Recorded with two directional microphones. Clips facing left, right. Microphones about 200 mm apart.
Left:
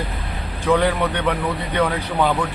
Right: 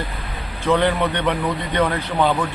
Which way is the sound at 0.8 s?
5° left (ahead or behind).